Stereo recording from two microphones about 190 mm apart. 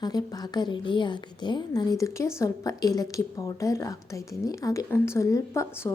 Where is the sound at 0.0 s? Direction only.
20° left (ahead or behind).